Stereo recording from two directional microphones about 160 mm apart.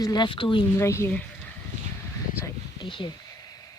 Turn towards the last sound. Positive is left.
turn(degrees=30)  # may be behind; listen again after turning